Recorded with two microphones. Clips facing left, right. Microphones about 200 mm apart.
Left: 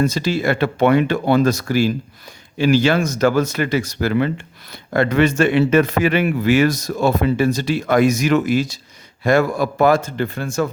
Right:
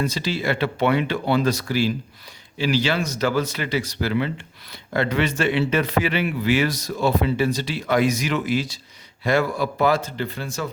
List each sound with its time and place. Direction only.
0.0 s speech: 45° left (ahead or behind)